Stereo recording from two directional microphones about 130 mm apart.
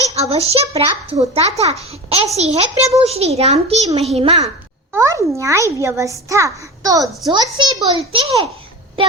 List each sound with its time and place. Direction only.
0.1 s a child's voice: 50° right (ahead or behind)
4.9 s a child's voice: 25° right (ahead or behind); by 8.3 s 40° right (ahead or behind)